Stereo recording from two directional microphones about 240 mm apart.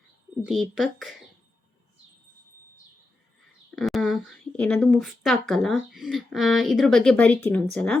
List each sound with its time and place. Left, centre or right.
0.4 s a woman's voice: centre
3.8 s a woman's voice: centre